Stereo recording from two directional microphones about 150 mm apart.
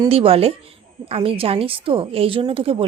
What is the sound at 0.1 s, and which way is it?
A woman's voice, 40° right (ahead or behind).